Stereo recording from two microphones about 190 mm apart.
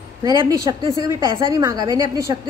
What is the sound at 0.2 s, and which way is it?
A woman's voice, 20° right (ahead or behind).